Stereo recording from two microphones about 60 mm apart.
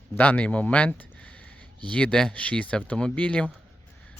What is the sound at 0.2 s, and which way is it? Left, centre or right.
Speech, left.